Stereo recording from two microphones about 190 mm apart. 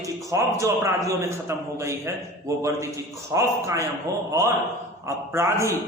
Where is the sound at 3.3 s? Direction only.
15° right (ahead or behind).